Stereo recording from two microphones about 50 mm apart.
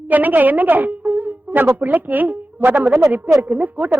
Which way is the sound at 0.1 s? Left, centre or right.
Right.